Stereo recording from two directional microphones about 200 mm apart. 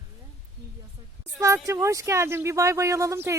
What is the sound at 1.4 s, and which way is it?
Speech, 15° right (ahead or behind).